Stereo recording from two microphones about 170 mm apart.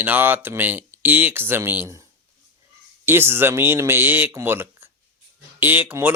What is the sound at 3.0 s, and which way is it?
Speech, 15° right (ahead or behind).